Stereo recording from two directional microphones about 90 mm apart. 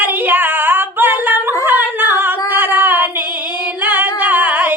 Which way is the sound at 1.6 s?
20° right (ahead or behind).